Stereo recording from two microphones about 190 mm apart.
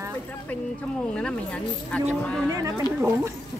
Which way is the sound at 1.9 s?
5° left (ahead or behind).